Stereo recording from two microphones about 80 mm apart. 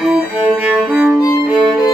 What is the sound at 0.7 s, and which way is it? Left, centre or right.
Music, centre.